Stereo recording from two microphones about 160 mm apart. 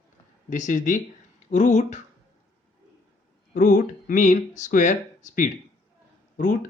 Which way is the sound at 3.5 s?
55° left (ahead or behind).